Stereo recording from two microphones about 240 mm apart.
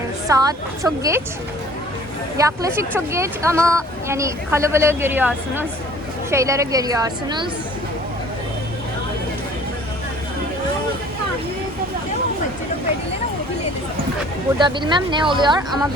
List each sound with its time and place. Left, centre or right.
0.3 s speech: centre
2.4 s speech: centre
14.6 s speech: centre